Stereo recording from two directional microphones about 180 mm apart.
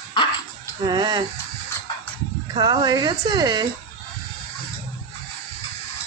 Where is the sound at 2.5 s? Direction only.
25° right (ahead or behind).